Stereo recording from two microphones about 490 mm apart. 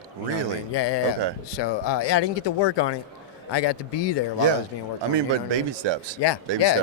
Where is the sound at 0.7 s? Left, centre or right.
Left.